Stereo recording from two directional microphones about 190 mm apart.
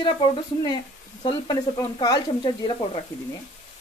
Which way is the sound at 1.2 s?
20° left (ahead or behind).